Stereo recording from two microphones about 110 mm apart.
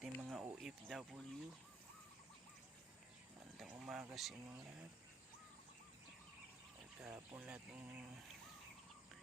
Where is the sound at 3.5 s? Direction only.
5° right (ahead or behind).